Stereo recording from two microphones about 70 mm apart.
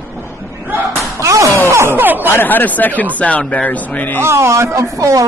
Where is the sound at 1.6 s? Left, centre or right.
Right.